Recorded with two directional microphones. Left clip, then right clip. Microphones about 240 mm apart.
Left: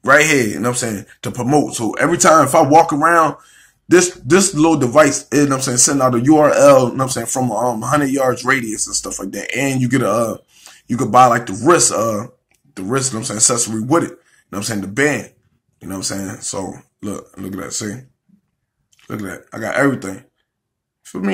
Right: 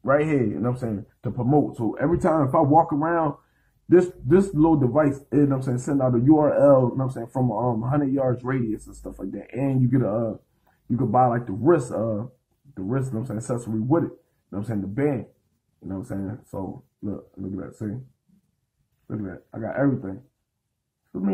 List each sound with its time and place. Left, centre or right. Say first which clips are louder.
0.0 s speech: left 10 dB; left
19.0 s speech: left 7 dB; left